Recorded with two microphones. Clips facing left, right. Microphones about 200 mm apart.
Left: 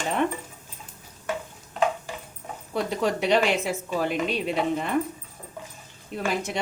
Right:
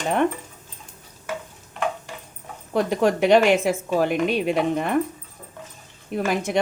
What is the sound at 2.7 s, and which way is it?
Speech, 50° right (ahead or behind).